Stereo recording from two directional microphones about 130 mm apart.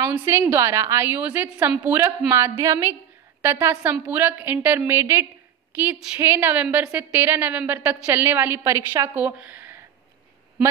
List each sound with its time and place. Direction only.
0.1 s a woman's voice: 15° right (ahead or behind)